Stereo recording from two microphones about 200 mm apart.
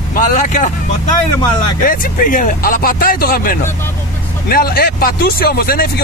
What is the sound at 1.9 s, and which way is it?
Speech, 45° left (ahead or behind).